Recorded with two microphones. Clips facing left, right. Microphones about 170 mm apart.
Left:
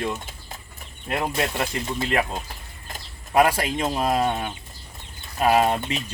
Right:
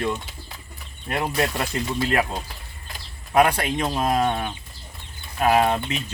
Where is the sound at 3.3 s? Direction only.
5° left (ahead or behind).